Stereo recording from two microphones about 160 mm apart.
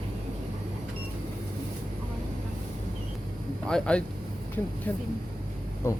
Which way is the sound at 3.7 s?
5° left (ahead or behind).